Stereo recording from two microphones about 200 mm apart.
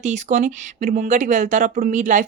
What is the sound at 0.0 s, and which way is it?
Speech, 35° right (ahead or behind).